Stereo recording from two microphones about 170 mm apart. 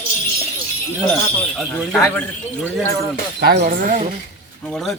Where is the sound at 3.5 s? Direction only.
55° right (ahead or behind).